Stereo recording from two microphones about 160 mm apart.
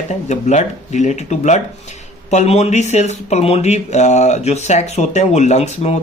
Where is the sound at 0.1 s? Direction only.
45° left (ahead or behind).